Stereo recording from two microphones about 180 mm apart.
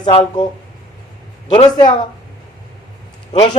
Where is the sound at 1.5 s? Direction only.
25° left (ahead or behind).